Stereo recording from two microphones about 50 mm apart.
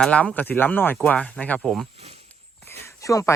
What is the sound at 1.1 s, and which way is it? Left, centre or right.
Speech, left.